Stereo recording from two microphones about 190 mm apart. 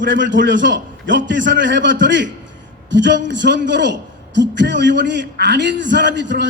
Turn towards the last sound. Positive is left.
turn(degrees=-70)  # may be behind; listen again after turning